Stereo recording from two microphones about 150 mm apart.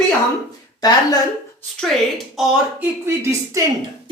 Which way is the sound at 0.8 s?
25° left (ahead or behind).